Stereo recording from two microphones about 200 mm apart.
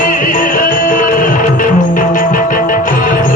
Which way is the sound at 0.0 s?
45° left (ahead or behind).